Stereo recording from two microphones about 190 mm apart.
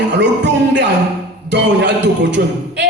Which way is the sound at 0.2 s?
65° right (ahead or behind).